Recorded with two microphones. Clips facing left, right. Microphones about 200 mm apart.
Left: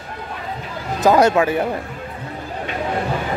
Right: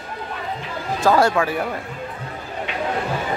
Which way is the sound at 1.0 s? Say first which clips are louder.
Left 3 dB; 20° left (ahead or behind).